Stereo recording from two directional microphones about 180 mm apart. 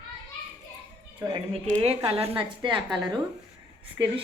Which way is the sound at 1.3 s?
30° right (ahead or behind).